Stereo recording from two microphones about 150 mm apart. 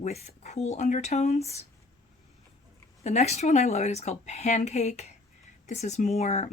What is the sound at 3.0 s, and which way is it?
Speech, 45° left (ahead or behind).